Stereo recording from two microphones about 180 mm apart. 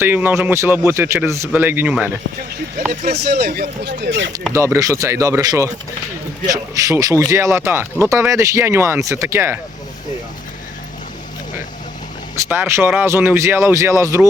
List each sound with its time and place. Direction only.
0.0 s speech: 10° right (ahead or behind)
2.9 s speech: 50° right (ahead or behind)
3.2 s speech: 60° right (ahead or behind); by 4.3 s 80° right
4.5 s speech: 15° right (ahead or behind)
12.5 s speech: 15° right (ahead or behind)